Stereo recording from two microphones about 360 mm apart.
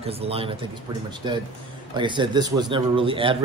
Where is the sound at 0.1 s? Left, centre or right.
Centre.